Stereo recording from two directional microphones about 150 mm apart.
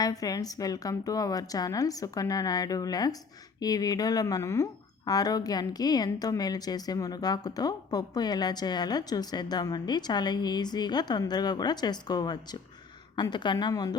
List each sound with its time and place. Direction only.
0.0 s a woman's voice: 25° left (ahead or behind)